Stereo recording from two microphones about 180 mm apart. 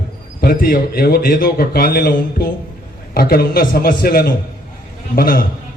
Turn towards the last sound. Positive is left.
turn(degrees=55)  # may be behind; listen again after turning